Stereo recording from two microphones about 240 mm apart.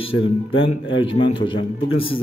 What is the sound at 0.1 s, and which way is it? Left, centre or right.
Speech, left.